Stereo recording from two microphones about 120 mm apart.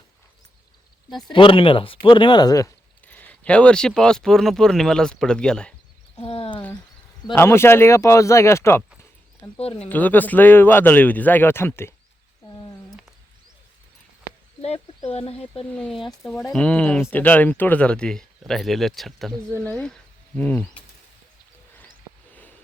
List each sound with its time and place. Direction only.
1.3 s speech: 45° left (ahead or behind); by 2.7 s 30° left (ahead or behind)
3.1 s speech: 15° left (ahead or behind)
6.1 s a sound: 55° left (ahead or behind)
7.3 s speech: 20° left (ahead or behind)
14.6 s a sound: 60° left (ahead or behind)
15.7 s speech: 5° left (ahead or behind)